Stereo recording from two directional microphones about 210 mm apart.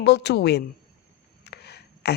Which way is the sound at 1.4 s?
50° left (ahead or behind).